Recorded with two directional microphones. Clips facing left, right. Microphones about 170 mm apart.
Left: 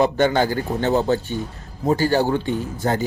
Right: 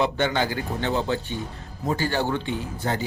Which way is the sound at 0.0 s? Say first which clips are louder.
Left 6 dB; 40° left (ahead or behind).